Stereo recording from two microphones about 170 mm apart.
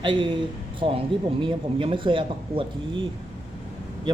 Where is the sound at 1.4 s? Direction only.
30° right (ahead or behind).